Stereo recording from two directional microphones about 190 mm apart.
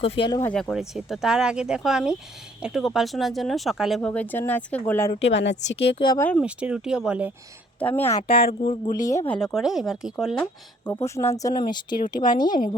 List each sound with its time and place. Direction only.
0.0 s a woman's voice: 25° left (ahead or behind)
0.5 s speech: centre (ahead or behind)
5.2 s speech: 65° left (ahead or behind)
6.1 s speech: 10° left (ahead or behind)
6.4 s speech: 5° right (ahead or behind)
7.8 s speech: 10° left (ahead or behind)
8.3 s speech: 50° left (ahead or behind)
9.0 s speech: 15° left (ahead or behind); by 10.4 s centre (ahead or behind)
10.4 s a woman's voice: 15° left (ahead or behind)